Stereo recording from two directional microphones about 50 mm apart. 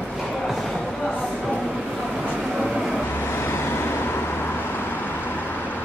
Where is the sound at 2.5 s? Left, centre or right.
Centre.